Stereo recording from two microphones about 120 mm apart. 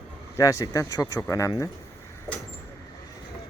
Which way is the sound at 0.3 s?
30° left (ahead or behind).